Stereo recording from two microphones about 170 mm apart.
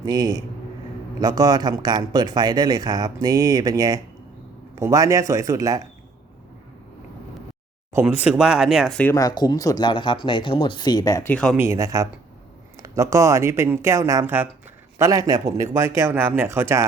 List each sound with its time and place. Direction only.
0.0 s speech: 25° right (ahead or behind)
8.0 s speech: 5° right (ahead or behind)
9.1 s speech: 25° left (ahead or behind)
11.5 s a man's voice: 15° right (ahead or behind)